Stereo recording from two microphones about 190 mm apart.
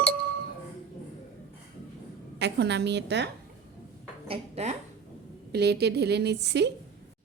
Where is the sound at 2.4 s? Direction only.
65° right (ahead or behind).